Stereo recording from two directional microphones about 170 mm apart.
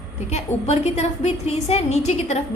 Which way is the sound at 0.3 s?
40° left (ahead or behind).